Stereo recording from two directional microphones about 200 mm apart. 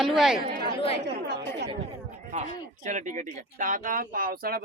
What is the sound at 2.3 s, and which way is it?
Speech, 35° right (ahead or behind).